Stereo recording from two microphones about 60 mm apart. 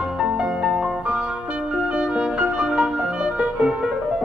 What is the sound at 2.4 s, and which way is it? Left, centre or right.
Music, centre.